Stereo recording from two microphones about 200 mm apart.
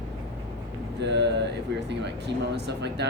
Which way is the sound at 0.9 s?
60° right (ahead or behind).